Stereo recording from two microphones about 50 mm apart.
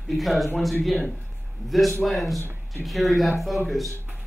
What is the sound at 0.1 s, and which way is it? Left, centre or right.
Speech, centre.